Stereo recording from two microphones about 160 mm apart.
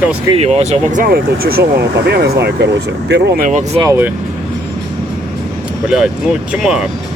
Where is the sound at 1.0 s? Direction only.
70° right (ahead or behind).